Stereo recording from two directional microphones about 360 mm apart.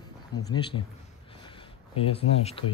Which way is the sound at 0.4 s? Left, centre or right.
Centre.